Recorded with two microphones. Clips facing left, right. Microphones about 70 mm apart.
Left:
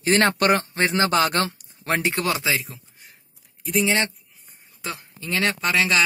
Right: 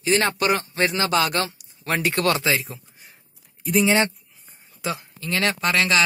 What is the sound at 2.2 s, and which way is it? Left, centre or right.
A man's voice, centre.